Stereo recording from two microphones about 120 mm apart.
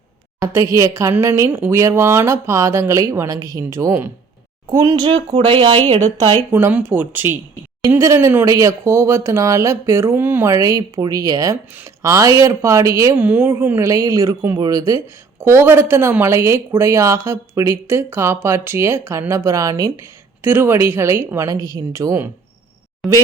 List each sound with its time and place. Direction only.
0.3 s speech: 25° right (ahead or behind); by 6.1 s 55° right (ahead or behind)
6.5 s speech: 20° right (ahead or behind)
13.1 s speech: 15° right (ahead or behind); by 15.0 s 30° right (ahead or behind)
15.4 s speech: 20° right (ahead or behind)
20.4 s speech: 20° right (ahead or behind)
23.0 s speech: centre (ahead or behind)